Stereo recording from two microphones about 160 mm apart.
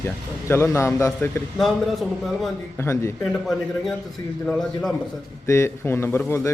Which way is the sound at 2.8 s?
15° left (ahead or behind).